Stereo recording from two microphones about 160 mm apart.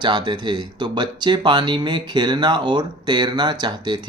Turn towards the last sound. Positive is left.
turn(degrees=-30)  # may be behind; listen again after turning